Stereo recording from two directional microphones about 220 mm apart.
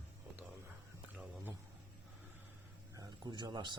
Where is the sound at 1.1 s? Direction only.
5° right (ahead or behind).